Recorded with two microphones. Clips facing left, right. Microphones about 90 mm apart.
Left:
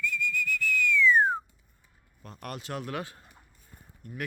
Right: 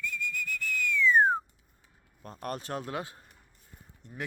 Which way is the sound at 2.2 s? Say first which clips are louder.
Right 2 dB; 35° right (ahead or behind).